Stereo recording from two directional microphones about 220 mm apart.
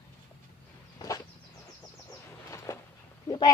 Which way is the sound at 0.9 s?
15° left (ahead or behind).